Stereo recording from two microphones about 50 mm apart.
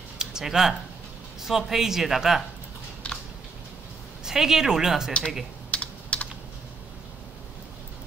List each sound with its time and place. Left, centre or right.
0.2 s speech: centre
4.2 s speech: centre
5.7 s typing: left